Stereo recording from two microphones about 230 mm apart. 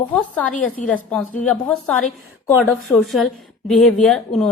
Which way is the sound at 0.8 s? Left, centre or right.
Left.